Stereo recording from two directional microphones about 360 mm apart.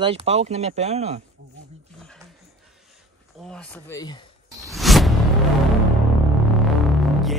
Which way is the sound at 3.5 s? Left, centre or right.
Centre.